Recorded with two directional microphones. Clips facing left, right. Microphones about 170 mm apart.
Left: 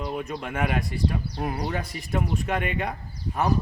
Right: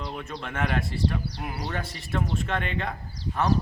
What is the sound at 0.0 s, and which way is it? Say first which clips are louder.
A man's voice: left 4 dB; 10° left (ahead or behind).